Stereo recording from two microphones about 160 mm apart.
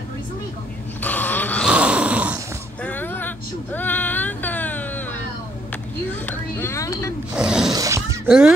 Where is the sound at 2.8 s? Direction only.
10° left (ahead or behind).